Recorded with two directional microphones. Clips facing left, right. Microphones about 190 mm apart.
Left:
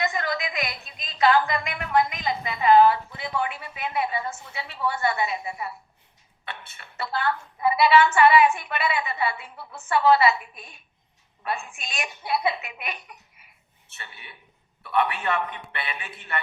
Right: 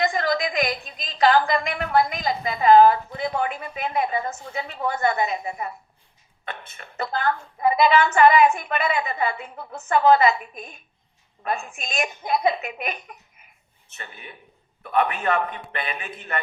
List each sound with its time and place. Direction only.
0.0 s a woman's voice: 35° right (ahead or behind)